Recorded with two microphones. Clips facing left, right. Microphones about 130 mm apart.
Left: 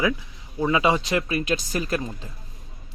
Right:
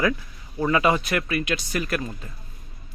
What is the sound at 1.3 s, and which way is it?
Speech, 35° left (ahead or behind).